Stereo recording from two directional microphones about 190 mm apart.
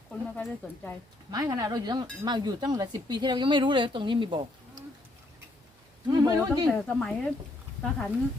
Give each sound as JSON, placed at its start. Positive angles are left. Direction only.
{"t": 0.1, "sound": "a woman's voice", "side_deg": 5}
{"t": 1.3, "sound": "speech", "side_deg": -20}
{"t": 6.1, "sound": "speech", "side_deg": -20}
{"t": 6.7, "sound": "speech", "side_deg": 5}